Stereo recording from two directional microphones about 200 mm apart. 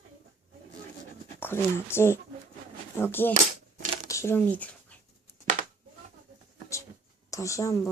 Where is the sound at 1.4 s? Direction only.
10° left (ahead or behind).